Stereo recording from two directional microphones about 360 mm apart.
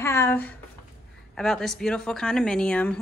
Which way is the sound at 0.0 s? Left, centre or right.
Centre.